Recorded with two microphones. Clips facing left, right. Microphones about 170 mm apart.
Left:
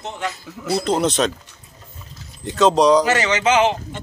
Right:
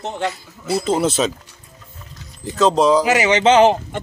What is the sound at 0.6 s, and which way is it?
Speech, 5° right (ahead or behind).